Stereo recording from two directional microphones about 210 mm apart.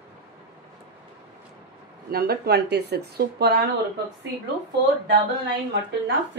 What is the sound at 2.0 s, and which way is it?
A woman's voice, 50° right (ahead or behind).